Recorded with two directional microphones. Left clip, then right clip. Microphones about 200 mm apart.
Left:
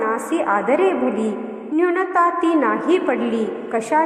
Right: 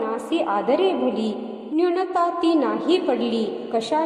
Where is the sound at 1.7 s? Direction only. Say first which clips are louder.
Left 3 dB; 10° left (ahead or behind).